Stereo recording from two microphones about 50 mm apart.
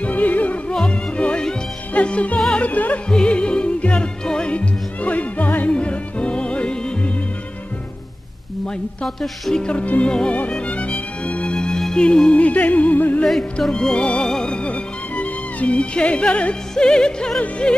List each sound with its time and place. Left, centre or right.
0.0 s music: left
0.8 s music: left
2.3 s music: centre
2.6 s music: left
3.1 s music: left
9.5 s music: centre
9.8 s music: left
10.0 s music: centre; by 13.2 s left
13.4 s music: centre